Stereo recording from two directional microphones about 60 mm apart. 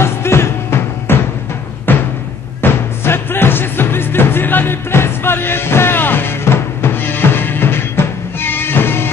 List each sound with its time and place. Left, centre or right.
0.0 s music: left